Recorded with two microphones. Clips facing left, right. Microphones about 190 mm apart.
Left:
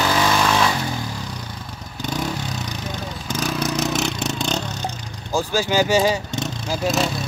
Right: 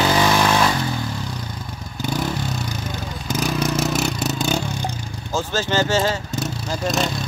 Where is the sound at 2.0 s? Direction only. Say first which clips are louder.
Right 2 dB; 5° right (ahead or behind).